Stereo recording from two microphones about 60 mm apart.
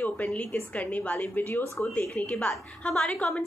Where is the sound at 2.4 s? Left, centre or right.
Centre.